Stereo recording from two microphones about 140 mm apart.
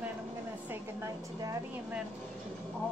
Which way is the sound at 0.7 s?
20° right (ahead or behind).